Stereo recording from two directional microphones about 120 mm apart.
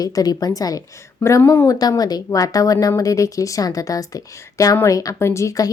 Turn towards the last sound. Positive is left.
turn(degrees=25)  # may be behind; listen again after turning